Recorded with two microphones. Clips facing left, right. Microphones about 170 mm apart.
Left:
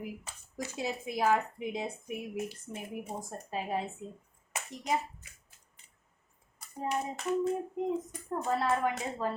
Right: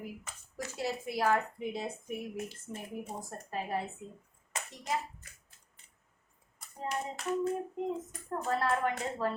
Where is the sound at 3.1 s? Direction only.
15° left (ahead or behind).